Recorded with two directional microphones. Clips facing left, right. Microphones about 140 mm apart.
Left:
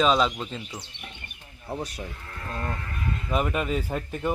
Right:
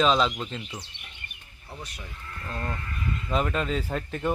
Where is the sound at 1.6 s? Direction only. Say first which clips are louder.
Left 9 dB; 40° left (ahead or behind).